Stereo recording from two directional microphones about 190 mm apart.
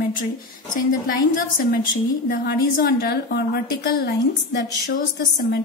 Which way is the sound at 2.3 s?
55° left (ahead or behind).